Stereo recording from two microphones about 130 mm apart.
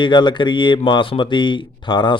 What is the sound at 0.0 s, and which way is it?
Speech, 35° left (ahead or behind).